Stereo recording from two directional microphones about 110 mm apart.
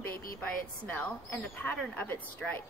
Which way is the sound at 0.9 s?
15° left (ahead or behind).